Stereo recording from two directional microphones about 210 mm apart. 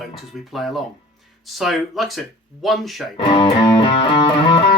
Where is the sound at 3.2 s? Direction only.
20° left (ahead or behind).